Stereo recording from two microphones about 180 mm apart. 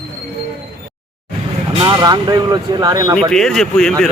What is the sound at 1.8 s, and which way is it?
Speech, 20° right (ahead or behind).